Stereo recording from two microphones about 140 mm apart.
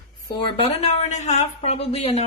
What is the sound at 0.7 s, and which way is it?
Speech, 50° left (ahead or behind).